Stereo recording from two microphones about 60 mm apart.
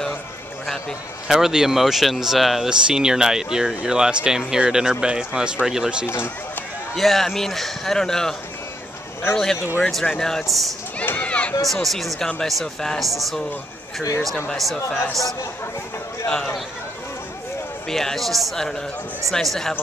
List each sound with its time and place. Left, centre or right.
1.2 s speech: centre
6.0 s speech: left
7.0 s a man's voice: centre
11.0 s a sound: left
11.6 s speech: centre
16.3 s a man's voice: centre
17.8 s speech: centre